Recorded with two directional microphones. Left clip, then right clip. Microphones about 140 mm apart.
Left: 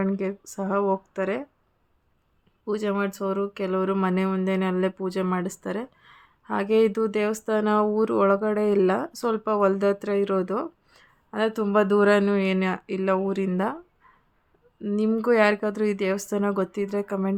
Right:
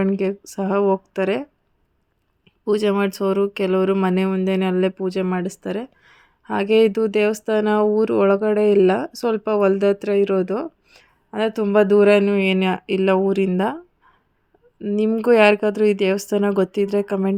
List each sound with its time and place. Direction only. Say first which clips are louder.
0.0 s speech: right 6 dB; 30° right (ahead or behind)
2.6 s speech: right 7 dB; 35° right (ahead or behind)
14.9 s speech: right 6 dB; 25° right (ahead or behind)